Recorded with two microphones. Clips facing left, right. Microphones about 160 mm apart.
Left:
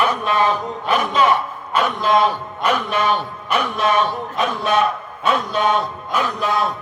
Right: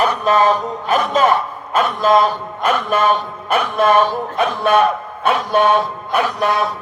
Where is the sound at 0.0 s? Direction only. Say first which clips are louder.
Right 4 dB; 40° right (ahead or behind).